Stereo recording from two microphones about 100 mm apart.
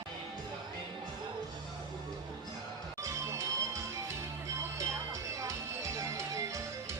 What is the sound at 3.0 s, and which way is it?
Music, 30° right (ahead or behind).